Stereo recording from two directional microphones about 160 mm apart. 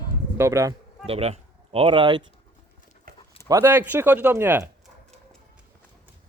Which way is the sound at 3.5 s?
15° right (ahead or behind).